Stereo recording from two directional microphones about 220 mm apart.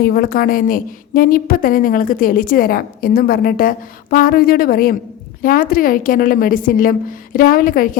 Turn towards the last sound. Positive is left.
turn(degrees=40)  # may be behind; listen again after turning